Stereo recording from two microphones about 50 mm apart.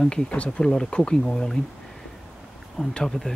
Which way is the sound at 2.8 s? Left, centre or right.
Centre.